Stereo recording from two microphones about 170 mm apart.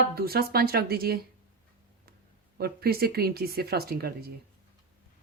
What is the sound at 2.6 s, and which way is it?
Speech, 65° right (ahead or behind).